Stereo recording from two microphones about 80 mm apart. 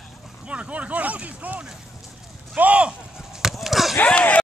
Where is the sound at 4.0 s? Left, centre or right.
Centre.